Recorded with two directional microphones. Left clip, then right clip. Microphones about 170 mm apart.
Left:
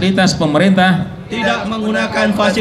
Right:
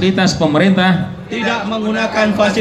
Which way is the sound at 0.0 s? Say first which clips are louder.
Even; 50° left (ahead or behind).